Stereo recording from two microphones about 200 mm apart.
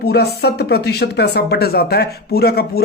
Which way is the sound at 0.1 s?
55° left (ahead or behind).